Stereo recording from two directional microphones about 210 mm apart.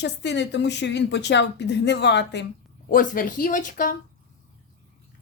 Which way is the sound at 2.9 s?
40° left (ahead or behind).